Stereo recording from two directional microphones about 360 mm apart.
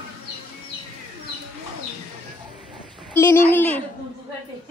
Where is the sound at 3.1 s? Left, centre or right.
Centre.